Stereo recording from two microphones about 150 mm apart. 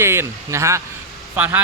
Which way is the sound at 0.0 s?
15° right (ahead or behind).